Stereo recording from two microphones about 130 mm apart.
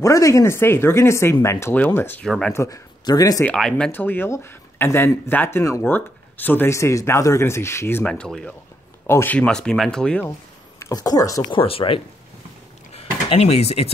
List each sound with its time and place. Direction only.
0.0 s speech: 25° left (ahead or behind); by 2.5 s 5° left (ahead or behind)
2.5 s speech: 25° left (ahead or behind)
3.4 s speech: 5° left (ahead or behind)
8.1 s speech: 5° left (ahead or behind)
10.8 s speech: 30° left (ahead or behind)
11.5 s speech: 45° left (ahead or behind)
12.9 s a sound: 50° left (ahead or behind)